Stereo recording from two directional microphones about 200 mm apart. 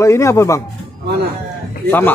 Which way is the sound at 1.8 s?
10° left (ahead or behind).